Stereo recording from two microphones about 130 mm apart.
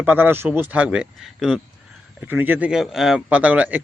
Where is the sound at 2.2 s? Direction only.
15° right (ahead or behind).